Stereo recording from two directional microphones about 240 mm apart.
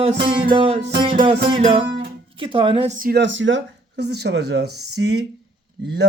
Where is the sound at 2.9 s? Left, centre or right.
Right.